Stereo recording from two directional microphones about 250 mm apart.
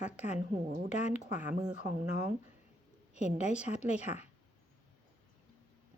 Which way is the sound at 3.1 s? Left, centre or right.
Left.